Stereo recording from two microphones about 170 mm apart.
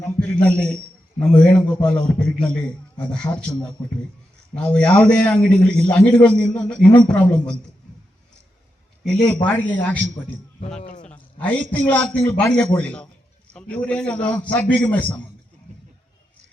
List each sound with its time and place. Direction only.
0.0 s a man's voice: 5° left (ahead or behind)
4.5 s a man's voice: 5° left (ahead or behind)
9.5 s a man's voice: 10° left (ahead or behind)
10.8 s speech: 50° left (ahead or behind)
11.0 s a man's voice: 10° left (ahead or behind)